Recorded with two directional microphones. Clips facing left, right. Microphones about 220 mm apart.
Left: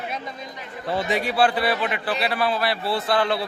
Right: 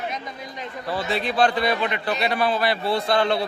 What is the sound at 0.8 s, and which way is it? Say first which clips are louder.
Speech: left 2 dB; 20° left (ahead or behind).